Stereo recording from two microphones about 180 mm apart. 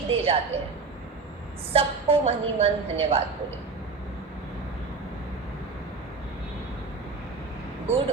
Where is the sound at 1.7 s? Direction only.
35° right (ahead or behind).